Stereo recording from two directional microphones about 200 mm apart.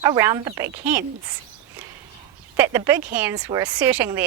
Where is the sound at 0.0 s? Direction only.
15° right (ahead or behind).